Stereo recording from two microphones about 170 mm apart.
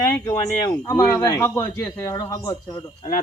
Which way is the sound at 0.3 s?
15° left (ahead or behind).